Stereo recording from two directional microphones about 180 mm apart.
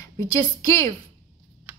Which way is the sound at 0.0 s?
20° left (ahead or behind).